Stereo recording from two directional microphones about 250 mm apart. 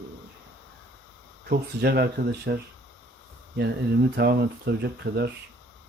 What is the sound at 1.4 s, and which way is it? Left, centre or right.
Speech, right.